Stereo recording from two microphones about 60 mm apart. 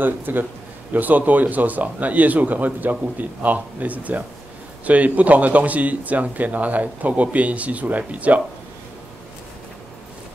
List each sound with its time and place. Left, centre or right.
0.0 s a man's voice: right